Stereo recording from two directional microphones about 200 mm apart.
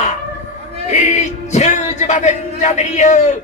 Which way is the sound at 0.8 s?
35° left (ahead or behind).